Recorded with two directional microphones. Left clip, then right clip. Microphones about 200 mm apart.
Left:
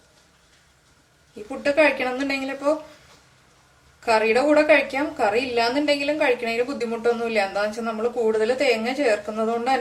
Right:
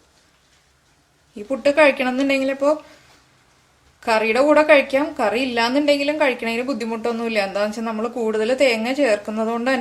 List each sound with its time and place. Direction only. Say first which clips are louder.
1.5 s a woman's voice: right 4 dB; 45° right (ahead or behind)
4.0 s a woman's voice: right 2 dB; 40° right (ahead or behind)